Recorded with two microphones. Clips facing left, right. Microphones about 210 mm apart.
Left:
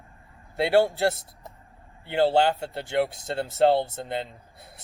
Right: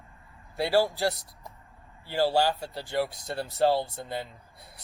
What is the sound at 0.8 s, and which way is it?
Speech, 25° left (ahead or behind).